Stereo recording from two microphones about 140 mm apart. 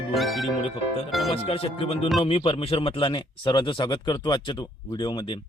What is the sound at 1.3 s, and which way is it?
A man's voice, 45° left (ahead or behind).